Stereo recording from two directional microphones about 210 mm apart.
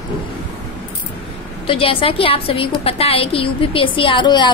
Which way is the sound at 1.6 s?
25° left (ahead or behind).